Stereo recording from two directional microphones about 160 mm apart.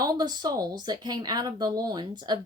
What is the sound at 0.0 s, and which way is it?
A woman's voice, 25° right (ahead or behind).